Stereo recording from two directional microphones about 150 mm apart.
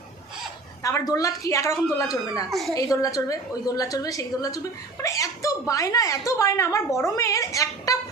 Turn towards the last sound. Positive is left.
turn(degrees=20)  # may be behind; listen again after turning